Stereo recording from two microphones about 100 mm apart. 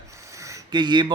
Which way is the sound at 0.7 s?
45° right (ahead or behind).